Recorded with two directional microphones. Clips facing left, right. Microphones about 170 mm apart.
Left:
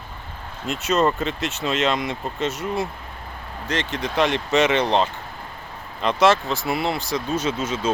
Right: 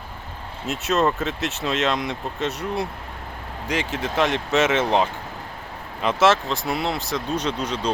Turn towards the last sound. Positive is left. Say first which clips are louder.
# left 1 dB
turn(degrees=5)  # may be behind; listen again after turning